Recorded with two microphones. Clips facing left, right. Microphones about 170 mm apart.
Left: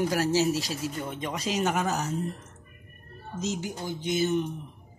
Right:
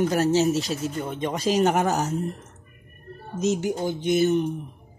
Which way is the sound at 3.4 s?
60° right (ahead or behind).